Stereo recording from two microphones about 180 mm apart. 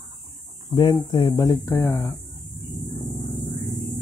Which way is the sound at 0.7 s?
25° left (ahead or behind).